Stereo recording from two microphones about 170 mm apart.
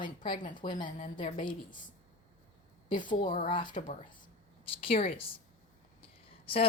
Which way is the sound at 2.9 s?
25° left (ahead or behind).